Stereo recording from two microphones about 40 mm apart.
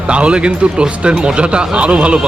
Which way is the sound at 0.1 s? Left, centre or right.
Right.